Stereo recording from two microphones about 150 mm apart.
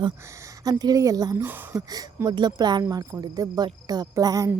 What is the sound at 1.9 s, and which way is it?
Speech, 25° right (ahead or behind).